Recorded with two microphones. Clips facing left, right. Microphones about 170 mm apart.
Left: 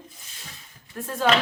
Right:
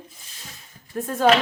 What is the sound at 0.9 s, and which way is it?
Speech, 45° right (ahead or behind).